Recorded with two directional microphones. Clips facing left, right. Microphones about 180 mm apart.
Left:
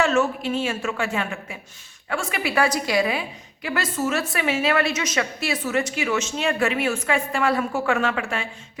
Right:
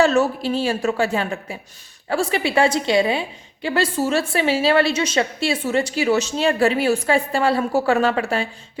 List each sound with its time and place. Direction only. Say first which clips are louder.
0.0 s a woman's voice: right 4 dB; 35° right (ahead or behind)